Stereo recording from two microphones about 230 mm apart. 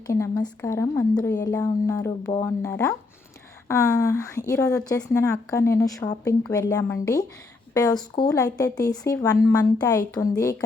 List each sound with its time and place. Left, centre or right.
0.1 s a woman's voice: centre